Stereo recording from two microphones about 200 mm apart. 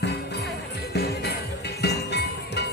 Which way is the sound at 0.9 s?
55° left (ahead or behind).